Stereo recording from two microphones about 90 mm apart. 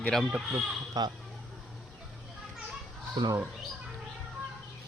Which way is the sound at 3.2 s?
60° right (ahead or behind).